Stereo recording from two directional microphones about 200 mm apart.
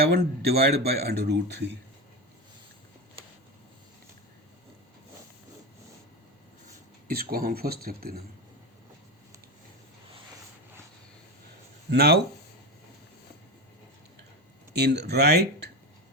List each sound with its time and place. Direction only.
0.0 s speech: 55° right (ahead or behind)
7.1 s speech: 45° right (ahead or behind)
11.9 s speech: 55° right (ahead or behind)
14.7 s speech: 55° right (ahead or behind)